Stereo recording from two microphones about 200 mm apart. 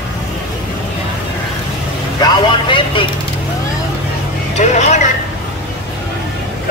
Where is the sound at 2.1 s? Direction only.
20° left (ahead or behind).